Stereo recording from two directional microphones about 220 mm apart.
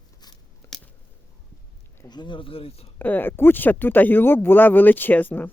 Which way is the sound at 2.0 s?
20° left (ahead or behind).